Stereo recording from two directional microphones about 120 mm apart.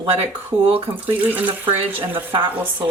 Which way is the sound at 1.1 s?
15° right (ahead or behind).